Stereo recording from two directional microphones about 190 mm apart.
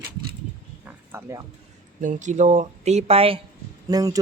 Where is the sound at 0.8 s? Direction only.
10° right (ahead or behind).